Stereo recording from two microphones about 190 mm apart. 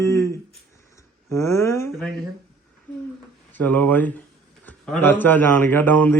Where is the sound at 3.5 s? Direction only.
10° left (ahead or behind).